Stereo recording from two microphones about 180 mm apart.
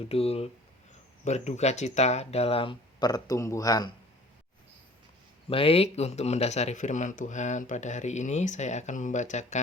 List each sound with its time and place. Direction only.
0.1 s speech: 35° left (ahead or behind)
5.5 s speech: 30° left (ahead or behind)